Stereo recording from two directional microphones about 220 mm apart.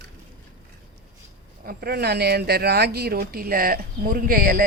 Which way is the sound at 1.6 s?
45° right (ahead or behind).